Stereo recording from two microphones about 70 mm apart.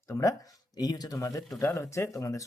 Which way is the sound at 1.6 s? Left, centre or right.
Left.